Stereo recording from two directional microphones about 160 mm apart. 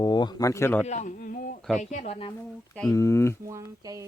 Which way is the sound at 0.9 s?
50° left (ahead or behind).